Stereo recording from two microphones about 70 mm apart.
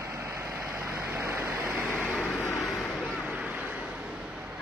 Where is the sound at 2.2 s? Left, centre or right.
Left.